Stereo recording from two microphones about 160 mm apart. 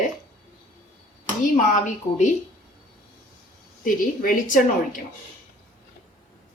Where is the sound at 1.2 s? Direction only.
50° left (ahead or behind).